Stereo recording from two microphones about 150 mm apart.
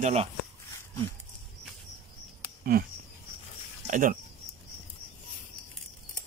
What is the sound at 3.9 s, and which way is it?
Speech, 60° right (ahead or behind).